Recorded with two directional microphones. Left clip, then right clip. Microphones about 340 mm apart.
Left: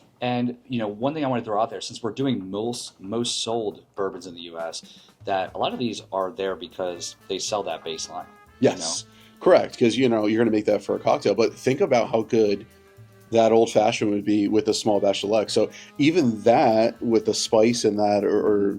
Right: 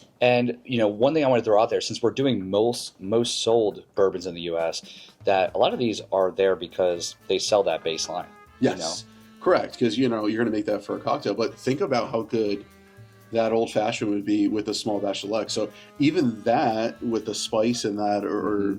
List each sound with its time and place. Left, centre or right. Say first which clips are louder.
0.2 s speech: right 6 dB; right
0.7 s speech: right 7 dB; centre
8.6 s speech: left 3 dB; left